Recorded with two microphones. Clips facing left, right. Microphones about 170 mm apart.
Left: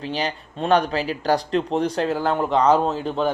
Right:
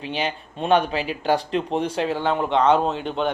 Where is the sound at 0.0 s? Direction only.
35° left (ahead or behind).